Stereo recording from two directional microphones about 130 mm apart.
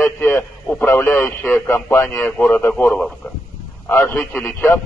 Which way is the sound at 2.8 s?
5° left (ahead or behind).